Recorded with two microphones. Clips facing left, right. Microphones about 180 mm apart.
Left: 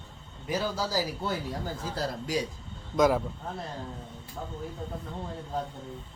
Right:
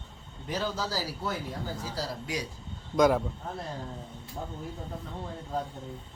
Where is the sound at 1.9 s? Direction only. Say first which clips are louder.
Left 5 dB; 55° left (ahead or behind).